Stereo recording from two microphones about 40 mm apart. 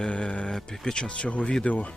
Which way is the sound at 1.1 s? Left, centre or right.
Left.